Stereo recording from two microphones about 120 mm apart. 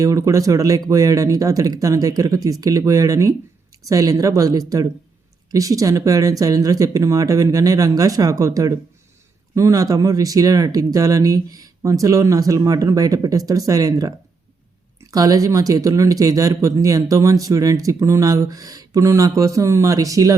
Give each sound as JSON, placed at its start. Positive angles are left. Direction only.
{"t": 0.0, "sound": "speech", "side_deg": -25}
{"t": 15.1, "sound": "speech", "side_deg": -30}